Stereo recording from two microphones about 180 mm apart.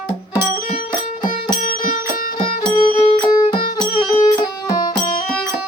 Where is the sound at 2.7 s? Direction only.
35° left (ahead or behind); by 5.0 s 20° left (ahead or behind).